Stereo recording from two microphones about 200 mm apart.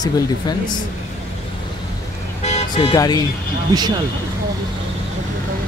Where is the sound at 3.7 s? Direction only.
20° right (ahead or behind).